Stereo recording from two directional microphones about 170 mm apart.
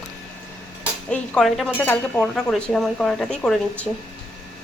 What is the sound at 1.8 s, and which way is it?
A woman's voice, 10° left (ahead or behind).